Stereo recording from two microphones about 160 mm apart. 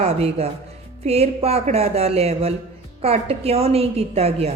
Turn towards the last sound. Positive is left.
turn(degrees=-40)  # may be behind; listen again after turning